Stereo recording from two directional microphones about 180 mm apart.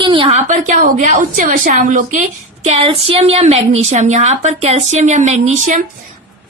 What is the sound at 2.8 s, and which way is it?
A woman's voice, 30° right (ahead or behind).